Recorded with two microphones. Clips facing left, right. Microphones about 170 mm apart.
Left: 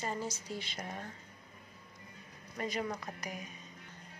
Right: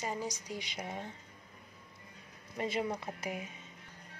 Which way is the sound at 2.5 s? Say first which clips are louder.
Right 2 dB; 25° right (ahead or behind).